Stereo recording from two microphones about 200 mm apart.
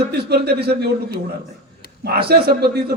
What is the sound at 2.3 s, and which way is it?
Speech, 50° right (ahead or behind).